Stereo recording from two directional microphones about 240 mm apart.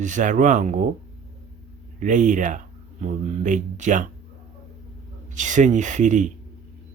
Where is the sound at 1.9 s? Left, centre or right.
Right.